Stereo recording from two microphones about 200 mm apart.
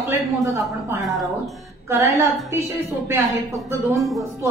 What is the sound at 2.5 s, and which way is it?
Speech, 10° right (ahead or behind).